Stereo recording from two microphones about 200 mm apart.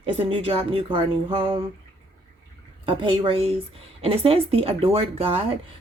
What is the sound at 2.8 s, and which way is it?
Speech, 25° right (ahead or behind).